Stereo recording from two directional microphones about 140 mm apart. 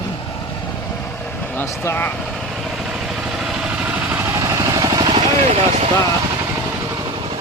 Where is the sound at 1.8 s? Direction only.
15° left (ahead or behind).